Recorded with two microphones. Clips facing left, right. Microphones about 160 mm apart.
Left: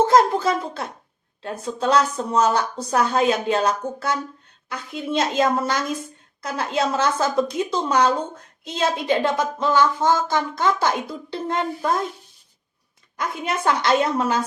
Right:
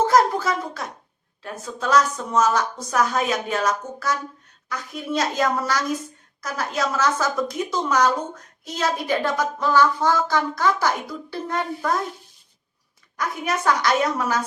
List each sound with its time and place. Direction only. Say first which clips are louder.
0.0 s a sound: left 2 dB; 25° left (ahead or behind)
1.4 s a woman's voice: left 5 dB; 30° left (ahead or behind)
13.1 s speech: even; 25° left (ahead or behind)